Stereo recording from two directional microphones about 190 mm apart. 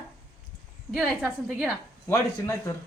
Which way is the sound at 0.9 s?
5° right (ahead or behind).